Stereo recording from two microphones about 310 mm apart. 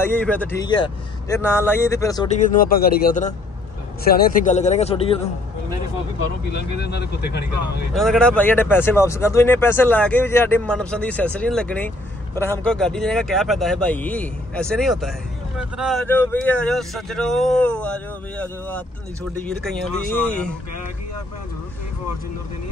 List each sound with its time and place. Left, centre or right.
0.0 s speech: centre
2.2 s a man's voice: left
6.5 s speech: left
7.9 s speech: centre